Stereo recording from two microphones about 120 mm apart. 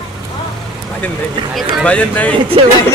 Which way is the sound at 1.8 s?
10° left (ahead or behind).